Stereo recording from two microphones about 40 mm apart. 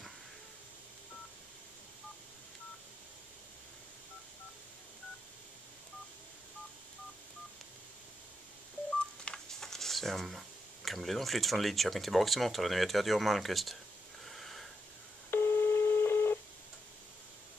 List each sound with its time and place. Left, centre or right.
9.3 s speech: centre
14.2 s wheeze: centre
15.3 s telephone dialing: left